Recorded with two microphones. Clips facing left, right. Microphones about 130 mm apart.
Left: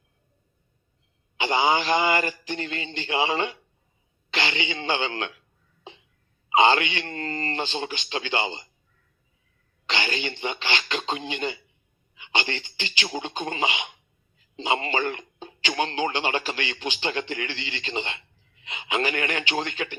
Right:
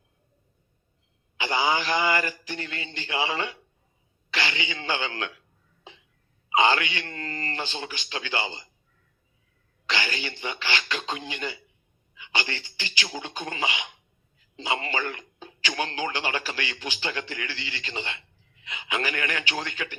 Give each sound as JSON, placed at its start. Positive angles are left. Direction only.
{"t": 1.4, "sound": "speech", "side_deg": 20}
{"t": 6.5, "sound": "speech", "side_deg": 25}
{"t": 9.8, "sound": "speech", "side_deg": 20}